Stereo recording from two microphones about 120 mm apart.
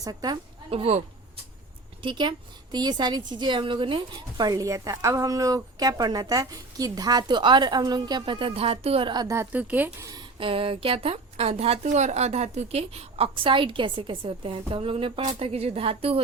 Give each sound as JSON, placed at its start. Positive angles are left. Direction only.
{"t": 0.0, "sound": "a woman's voice", "side_deg": -30}
{"t": 0.7, "sound": "a woman's voice", "side_deg": -50}
{"t": 2.0, "sound": "a woman's voice", "side_deg": -40}
{"t": 9.2, "sound": "a woman's voice", "side_deg": -20}
{"t": 10.0, "sound": "speech", "side_deg": -30}
{"t": 10.3, "sound": "a woman's voice", "side_deg": -50}